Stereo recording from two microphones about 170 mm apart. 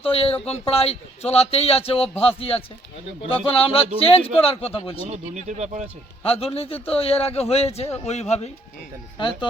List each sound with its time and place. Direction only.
0.0 s a man's voice: 35° left (ahead or behind)
5.0 s speech: 40° right (ahead or behind)
6.2 s a man's voice: 35° left (ahead or behind)
9.1 s speech: 25° left (ahead or behind)